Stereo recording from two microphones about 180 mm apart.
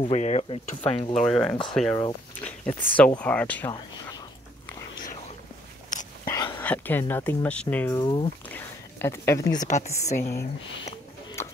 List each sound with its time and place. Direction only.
0.1 s speech: 40° left (ahead or behind)
1.2 s speech: 5° left (ahead or behind)
5.9 s whispering: 45° left (ahead or behind)
6.2 s whispering: 25° left (ahead or behind)
6.6 s speech: 10° left (ahead or behind)
8.0 s speech: 25° left (ahead or behind)
8.5 s a sound: 10° left (ahead or behind)
9.7 s speech: 40° left (ahead or behind)